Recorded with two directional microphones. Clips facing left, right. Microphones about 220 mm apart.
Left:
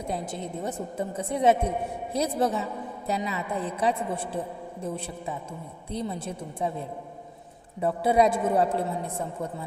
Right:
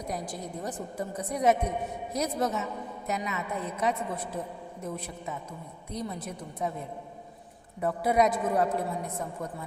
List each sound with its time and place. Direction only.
0.0 s a woman's voice: 25° left (ahead or behind)